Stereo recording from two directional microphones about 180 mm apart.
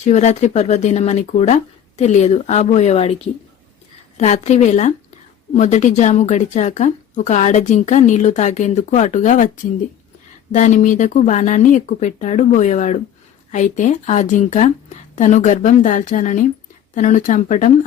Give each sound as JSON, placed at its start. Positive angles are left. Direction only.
{"t": 0.0, "sound": "a woman's voice", "side_deg": 40}
{"t": 4.2, "sound": "a woman's voice", "side_deg": 40}
{"t": 10.5, "sound": "speech", "side_deg": 40}